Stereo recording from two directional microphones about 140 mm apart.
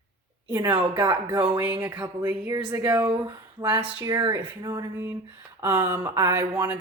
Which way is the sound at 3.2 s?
30° right (ahead or behind).